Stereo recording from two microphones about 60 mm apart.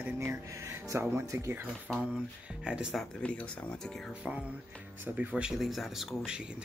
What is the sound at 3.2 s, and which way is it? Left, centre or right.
Speech, left.